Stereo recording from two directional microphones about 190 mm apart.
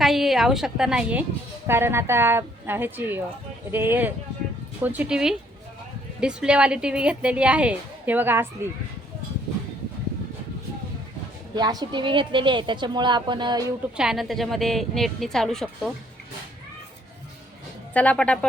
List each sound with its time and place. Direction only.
0.0 s a woman's voice: centre (ahead or behind)
11.5 s a woman's voice: 20° right (ahead or behind)
13.9 s a woman's voice: 5° right (ahead or behind)
17.9 s a woman's voice: 5° left (ahead or behind)